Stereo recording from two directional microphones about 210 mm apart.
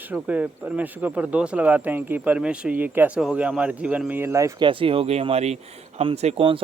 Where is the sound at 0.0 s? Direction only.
5° right (ahead or behind).